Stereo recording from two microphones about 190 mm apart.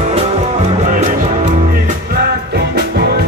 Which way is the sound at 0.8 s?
45° right (ahead or behind).